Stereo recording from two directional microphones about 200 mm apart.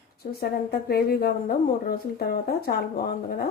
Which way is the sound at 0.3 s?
50° left (ahead or behind).